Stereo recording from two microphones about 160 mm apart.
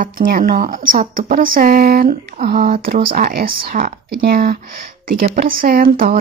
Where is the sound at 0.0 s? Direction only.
60° right (ahead or behind).